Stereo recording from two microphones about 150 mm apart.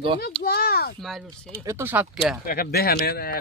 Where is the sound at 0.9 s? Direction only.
Centre (ahead or behind).